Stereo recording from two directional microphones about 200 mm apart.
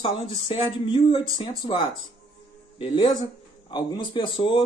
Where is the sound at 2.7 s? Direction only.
25° left (ahead or behind).